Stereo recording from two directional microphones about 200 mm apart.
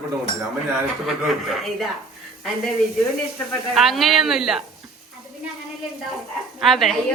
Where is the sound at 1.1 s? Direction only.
Centre (ahead or behind).